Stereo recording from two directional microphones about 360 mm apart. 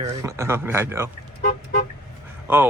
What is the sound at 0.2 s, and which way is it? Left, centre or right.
Speech, centre.